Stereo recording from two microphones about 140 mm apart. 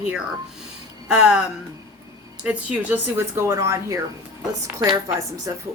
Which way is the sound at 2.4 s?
10° right (ahead or behind).